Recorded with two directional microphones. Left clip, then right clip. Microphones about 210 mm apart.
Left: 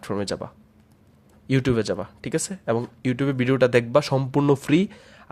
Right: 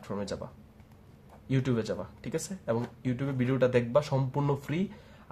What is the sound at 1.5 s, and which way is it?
Speech, 35° left (ahead or behind).